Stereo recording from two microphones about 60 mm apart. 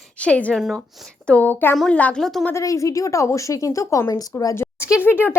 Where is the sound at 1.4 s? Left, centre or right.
Left.